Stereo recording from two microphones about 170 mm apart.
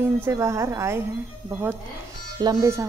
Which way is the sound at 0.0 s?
15° right (ahead or behind).